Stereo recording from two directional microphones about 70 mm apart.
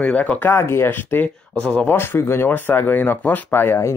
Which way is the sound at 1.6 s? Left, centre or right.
Centre.